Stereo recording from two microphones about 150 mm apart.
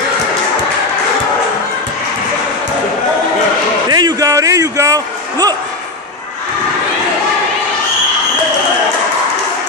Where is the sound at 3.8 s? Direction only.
25° right (ahead or behind).